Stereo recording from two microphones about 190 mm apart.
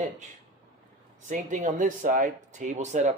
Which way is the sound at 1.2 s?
40° right (ahead or behind).